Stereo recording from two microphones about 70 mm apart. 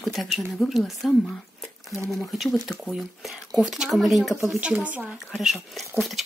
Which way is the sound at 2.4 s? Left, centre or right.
Centre.